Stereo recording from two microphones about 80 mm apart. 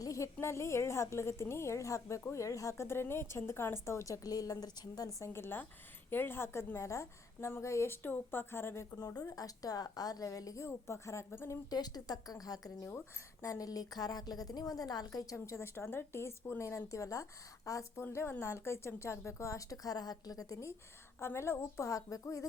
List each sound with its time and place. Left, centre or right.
0.0 s a sound: left
0.3 s a woman's voice: left
5.3 s a woman's voice: left
9.0 s a woman's voice: left
11.7 s a woman's voice: left
18.0 s a woman's voice: left